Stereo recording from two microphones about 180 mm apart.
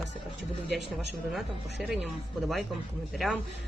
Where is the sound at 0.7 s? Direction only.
70° right (ahead or behind).